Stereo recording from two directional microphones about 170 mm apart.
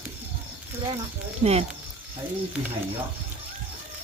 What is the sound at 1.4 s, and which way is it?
Speech, 35° right (ahead or behind).